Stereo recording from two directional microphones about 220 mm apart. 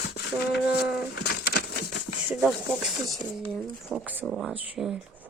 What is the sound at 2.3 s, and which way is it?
Speech, 5° right (ahead or behind).